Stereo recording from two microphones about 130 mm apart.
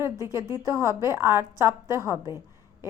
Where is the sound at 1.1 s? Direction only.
20° right (ahead or behind).